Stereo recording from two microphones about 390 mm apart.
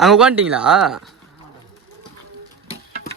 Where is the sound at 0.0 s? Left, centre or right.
Centre.